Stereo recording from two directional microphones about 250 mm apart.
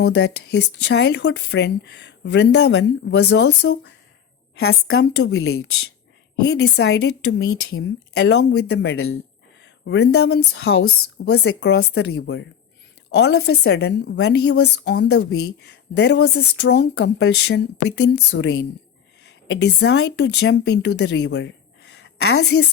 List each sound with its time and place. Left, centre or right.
0.2 s speech: left
4.9 s speech: left
6.5 s speech: left